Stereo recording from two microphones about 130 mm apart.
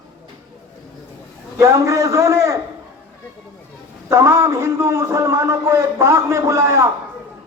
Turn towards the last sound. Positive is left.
turn(degrees=-20)  # may be behind; listen again after turning